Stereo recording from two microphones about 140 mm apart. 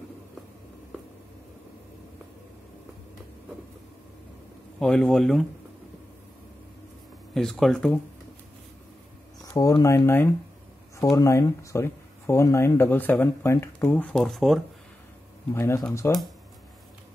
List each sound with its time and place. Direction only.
4.7 s speech: 5° left (ahead or behind)
7.3 s speech: centre (ahead or behind)
9.4 s speech: 25° left (ahead or behind)
14.0 s speech: centre (ahead or behind)
15.5 s speech: 20° left (ahead or behind)